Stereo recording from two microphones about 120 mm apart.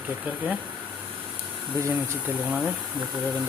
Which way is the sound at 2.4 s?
10° right (ahead or behind).